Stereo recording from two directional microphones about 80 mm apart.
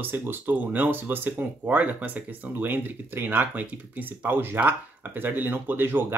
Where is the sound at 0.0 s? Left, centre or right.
Right.